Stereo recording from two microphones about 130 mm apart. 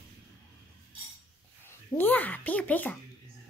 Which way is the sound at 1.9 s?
15° left (ahead or behind).